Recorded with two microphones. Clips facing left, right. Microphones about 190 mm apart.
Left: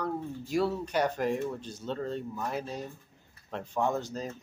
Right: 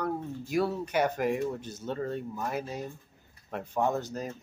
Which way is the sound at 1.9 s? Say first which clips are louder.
Right 1 dB; 10° right (ahead or behind).